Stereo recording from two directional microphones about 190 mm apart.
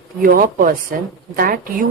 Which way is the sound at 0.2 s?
50° right (ahead or behind).